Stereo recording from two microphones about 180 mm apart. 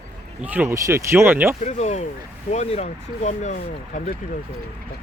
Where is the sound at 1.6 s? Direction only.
40° left (ahead or behind).